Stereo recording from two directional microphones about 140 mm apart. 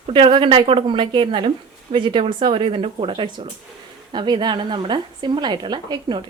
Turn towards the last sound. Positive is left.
turn(degrees=-30)  # may be behind; listen again after turning